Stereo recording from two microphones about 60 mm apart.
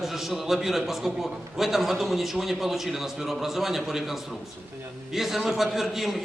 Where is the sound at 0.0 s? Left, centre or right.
Centre.